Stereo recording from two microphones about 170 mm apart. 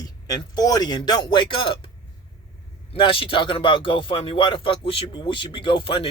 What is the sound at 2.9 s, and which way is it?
Speech, 30° left (ahead or behind).